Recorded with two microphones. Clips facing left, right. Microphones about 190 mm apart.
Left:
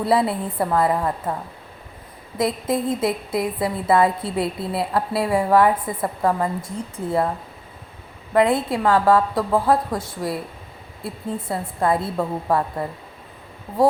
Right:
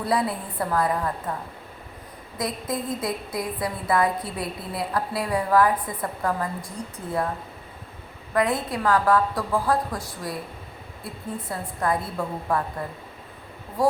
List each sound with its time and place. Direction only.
0.0 s a woman's voice: 25° left (ahead or behind)
2.4 s a woman's voice: 25° left (ahead or behind)
8.3 s a woman's voice: 25° left (ahead or behind)